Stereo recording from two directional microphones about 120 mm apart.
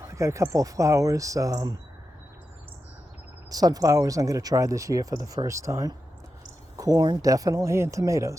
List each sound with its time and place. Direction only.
0.1 s speech: 25° right (ahead or behind)
3.5 s speech: 30° right (ahead or behind)